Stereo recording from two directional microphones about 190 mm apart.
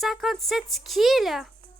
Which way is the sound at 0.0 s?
Centre (ahead or behind).